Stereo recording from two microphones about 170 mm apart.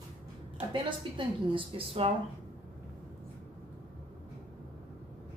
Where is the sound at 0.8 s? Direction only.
30° right (ahead or behind).